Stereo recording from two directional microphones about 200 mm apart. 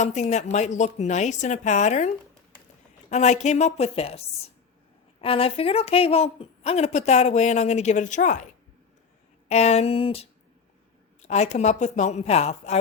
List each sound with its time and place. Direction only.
0.0 s speech: 35° left (ahead or behind)
9.5 s speech: 35° left (ahead or behind)